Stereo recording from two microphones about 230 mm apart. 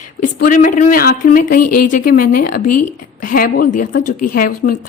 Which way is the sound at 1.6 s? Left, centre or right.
Left.